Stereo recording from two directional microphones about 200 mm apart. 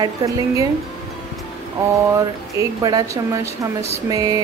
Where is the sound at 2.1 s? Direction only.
15° right (ahead or behind).